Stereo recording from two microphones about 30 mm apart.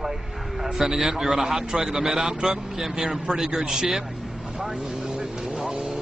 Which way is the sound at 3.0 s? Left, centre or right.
Centre.